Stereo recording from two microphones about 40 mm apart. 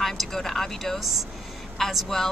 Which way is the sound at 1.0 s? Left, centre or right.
Centre.